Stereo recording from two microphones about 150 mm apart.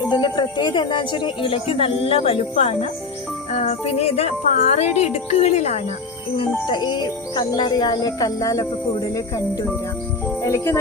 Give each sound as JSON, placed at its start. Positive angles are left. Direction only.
{"t": 0.1, "sound": "speech", "side_deg": 30}
{"t": 6.3, "sound": "speech", "side_deg": 35}